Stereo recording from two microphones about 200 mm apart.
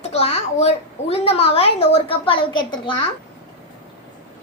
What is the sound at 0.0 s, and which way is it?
A child's voice, 30° left (ahead or behind).